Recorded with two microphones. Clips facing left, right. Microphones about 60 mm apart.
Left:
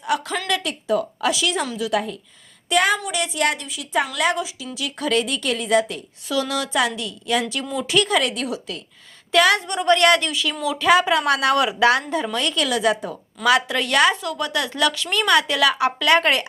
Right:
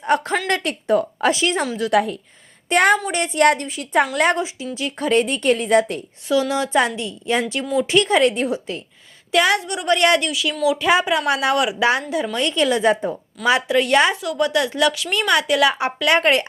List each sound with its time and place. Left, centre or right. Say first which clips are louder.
0.0 s speech: right 4 dB; right
1.9 s a woman's voice: right 7 dB; right
2.6 s a woman's voice: right 3 dB; right
3.1 s speech: right 6 dB; right
6.2 s a woman's voice: right 4 dB; right
9.3 s a woman's voice: left 1 dB; centre
10.0 s a woman's voice: right 2 dB; centre
10.2 s a woman's voice: right 4 dB; centre
14.9 s a woman's voice: left 1 dB; centre